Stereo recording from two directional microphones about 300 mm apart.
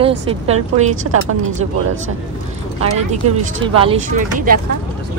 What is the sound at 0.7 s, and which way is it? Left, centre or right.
Speech, right.